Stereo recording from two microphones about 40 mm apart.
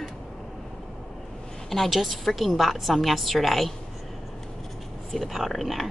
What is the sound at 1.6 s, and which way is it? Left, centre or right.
Speech, centre.